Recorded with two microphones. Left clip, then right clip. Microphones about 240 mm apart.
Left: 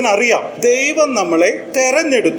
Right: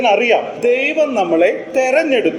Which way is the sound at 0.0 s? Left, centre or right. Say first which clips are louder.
Right 1 dB; left.